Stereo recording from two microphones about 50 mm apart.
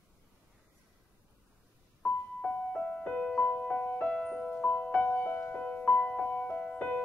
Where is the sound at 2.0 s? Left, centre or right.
Left.